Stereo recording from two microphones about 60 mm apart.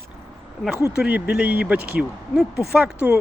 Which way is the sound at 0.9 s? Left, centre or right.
Centre.